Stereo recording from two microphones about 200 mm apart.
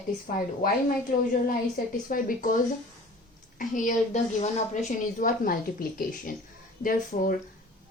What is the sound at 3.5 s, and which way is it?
A woman's voice, 40° left (ahead or behind).